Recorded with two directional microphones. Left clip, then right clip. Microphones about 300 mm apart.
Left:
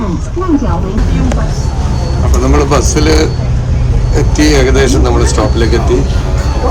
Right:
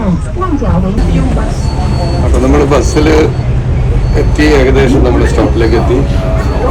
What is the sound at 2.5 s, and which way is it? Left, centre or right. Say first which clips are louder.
Speech: right 1 dB; centre.